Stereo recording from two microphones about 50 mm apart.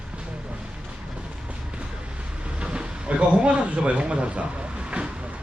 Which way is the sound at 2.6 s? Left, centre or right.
Centre.